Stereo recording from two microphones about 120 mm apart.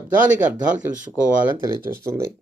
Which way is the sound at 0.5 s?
90° right.